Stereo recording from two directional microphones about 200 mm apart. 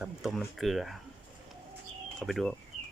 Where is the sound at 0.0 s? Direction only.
Centre (ahead or behind).